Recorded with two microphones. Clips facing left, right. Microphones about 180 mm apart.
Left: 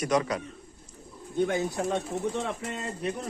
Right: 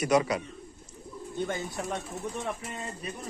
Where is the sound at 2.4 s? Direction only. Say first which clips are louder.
Left 3 dB; 80° left.